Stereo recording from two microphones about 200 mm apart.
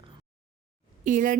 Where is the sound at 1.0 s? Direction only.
40° right (ahead or behind).